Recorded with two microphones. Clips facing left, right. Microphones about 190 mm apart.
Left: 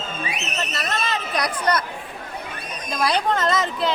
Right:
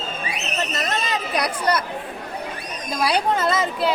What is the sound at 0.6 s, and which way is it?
Speech, 15° right (ahead or behind).